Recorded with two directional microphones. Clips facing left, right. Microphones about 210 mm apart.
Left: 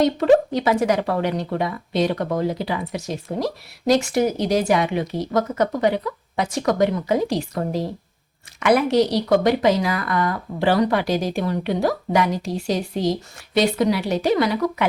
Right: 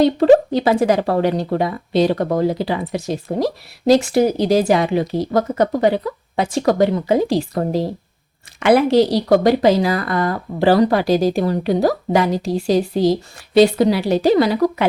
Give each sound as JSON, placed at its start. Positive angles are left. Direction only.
{"t": 0.0, "sound": "speech", "side_deg": -30}